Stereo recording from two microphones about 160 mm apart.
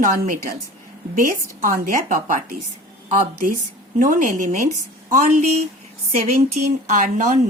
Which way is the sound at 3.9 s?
55° right (ahead or behind).